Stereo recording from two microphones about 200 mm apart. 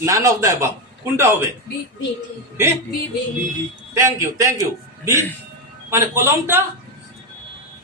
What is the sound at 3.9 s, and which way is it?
Speech, 15° right (ahead or behind).